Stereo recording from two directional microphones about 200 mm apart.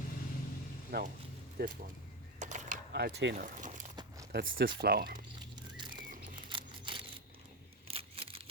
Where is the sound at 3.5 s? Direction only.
40° right (ahead or behind).